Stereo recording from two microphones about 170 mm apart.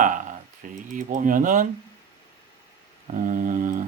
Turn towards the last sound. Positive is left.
turn(degrees=-50)  # may be behind; listen again after turning